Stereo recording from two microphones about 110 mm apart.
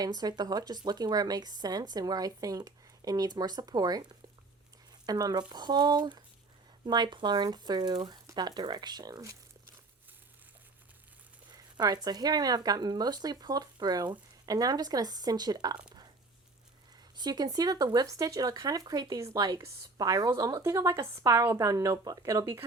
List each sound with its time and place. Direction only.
0.0 s speech: 35° right (ahead or behind)
5.0 s speech: 35° right (ahead or behind)
11.8 s speech: 35° right (ahead or behind)
17.2 s speech: 40° right (ahead or behind)